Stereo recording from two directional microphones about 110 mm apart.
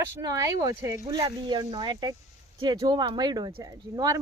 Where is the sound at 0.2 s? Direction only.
30° right (ahead or behind).